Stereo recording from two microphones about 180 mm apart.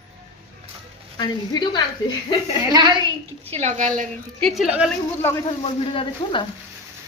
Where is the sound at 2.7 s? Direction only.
20° right (ahead or behind).